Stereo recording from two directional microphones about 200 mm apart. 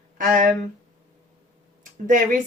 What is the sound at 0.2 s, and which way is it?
Speech, 40° right (ahead or behind).